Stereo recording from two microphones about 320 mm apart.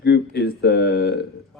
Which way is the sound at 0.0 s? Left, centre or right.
Left.